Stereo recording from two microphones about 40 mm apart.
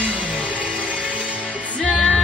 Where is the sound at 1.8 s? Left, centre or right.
Centre.